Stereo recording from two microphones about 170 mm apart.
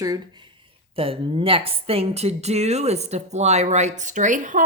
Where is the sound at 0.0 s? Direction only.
25° right (ahead or behind).